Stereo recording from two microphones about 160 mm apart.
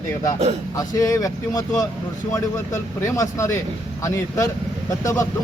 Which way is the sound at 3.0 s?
20° left (ahead or behind).